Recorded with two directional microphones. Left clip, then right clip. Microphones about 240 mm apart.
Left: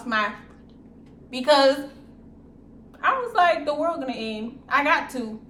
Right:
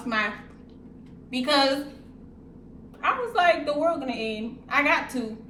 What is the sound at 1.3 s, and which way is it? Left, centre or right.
Speech, centre.